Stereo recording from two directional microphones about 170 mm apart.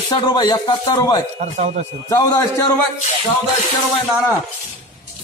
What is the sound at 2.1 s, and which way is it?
Speech, 20° left (ahead or behind).